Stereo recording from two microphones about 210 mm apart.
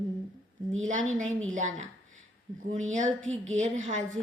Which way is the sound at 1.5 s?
35° right (ahead or behind).